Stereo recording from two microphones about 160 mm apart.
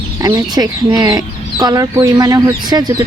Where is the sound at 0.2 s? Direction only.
20° right (ahead or behind).